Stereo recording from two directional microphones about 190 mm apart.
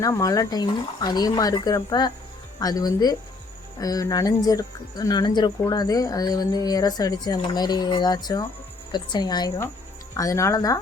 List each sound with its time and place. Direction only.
0.0 s speech: 15° left (ahead or behind)